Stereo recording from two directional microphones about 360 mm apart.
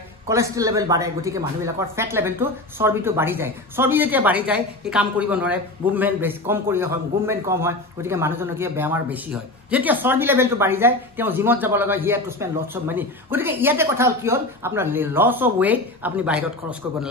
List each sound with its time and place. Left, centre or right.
0.3 s speech: centre